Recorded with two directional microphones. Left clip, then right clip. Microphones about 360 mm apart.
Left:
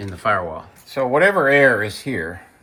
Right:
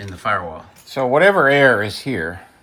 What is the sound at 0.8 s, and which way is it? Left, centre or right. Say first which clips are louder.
Speech: right 2 dB; right.